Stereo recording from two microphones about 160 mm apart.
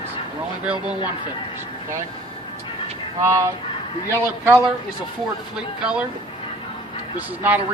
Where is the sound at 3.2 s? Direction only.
20° right (ahead or behind).